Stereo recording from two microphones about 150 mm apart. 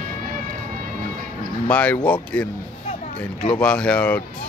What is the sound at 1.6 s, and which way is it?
Speech, 10° left (ahead or behind).